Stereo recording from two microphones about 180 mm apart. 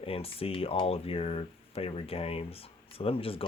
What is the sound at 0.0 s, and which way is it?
Speech, 30° left (ahead or behind).